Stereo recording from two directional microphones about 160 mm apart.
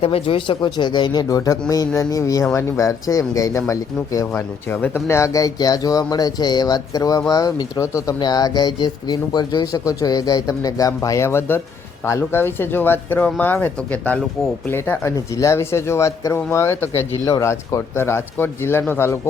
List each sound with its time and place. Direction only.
0.0 s speech: 35° left (ahead or behind); by 19.3 s 15° left (ahead or behind)